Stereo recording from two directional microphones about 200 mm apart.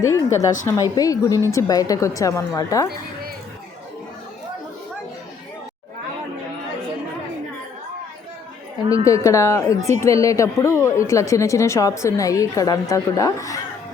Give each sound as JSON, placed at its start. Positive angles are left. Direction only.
{"t": 0.0, "sound": "speech", "side_deg": 15}
{"t": 9.0, "sound": "speech", "side_deg": 15}